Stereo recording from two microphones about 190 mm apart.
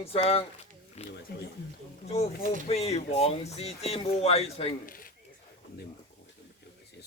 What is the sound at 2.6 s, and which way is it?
Speech, 35° left (ahead or behind).